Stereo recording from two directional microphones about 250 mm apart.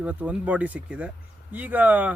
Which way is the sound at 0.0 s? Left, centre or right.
Centre.